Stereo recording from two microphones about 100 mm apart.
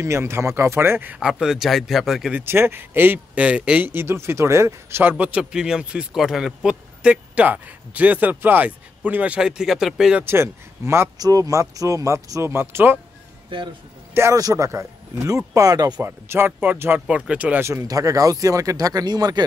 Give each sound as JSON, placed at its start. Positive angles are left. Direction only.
{"t": 0.0, "sound": "speech", "side_deg": -25}
{"t": 2.3, "sound": "speech", "side_deg": -20}
{"t": 5.1, "sound": "speech", "side_deg": -15}
{"t": 10.2, "sound": "speech", "side_deg": -25}
{"t": 11.1, "sound": "speech", "side_deg": -40}
{"t": 14.1, "sound": "a man's voice", "side_deg": -25}
{"t": 16.0, "sound": "speech", "side_deg": -25}
{"t": 17.6, "sound": "speech", "side_deg": -35}